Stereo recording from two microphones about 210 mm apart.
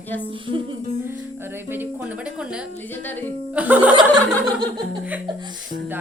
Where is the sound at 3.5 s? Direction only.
5° right (ahead or behind).